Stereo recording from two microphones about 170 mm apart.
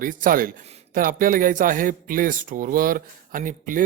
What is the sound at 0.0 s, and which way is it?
Speech, 55° right (ahead or behind).